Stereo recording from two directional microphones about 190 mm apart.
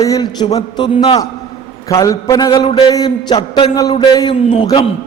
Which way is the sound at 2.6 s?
30° left (ahead or behind).